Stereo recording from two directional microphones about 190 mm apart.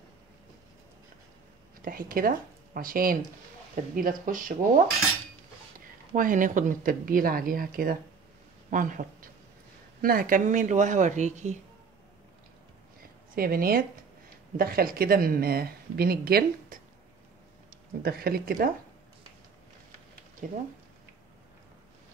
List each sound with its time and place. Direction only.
1.8 s speech: 50° right (ahead or behind)
6.1 s speech: 45° right (ahead or behind)
13.3 s speech: 50° right (ahead or behind)
20.4 s speech: 45° right (ahead or behind)